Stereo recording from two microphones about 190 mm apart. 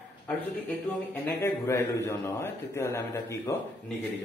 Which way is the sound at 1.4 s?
15° left (ahead or behind).